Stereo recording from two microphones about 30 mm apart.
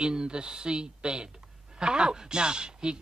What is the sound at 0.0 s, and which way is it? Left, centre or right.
Speech, right.